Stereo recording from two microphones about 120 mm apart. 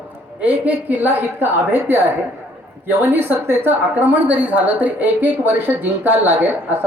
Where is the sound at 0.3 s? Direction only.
10° right (ahead or behind).